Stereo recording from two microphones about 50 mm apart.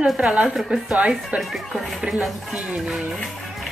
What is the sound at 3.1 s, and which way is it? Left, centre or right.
Music, centre.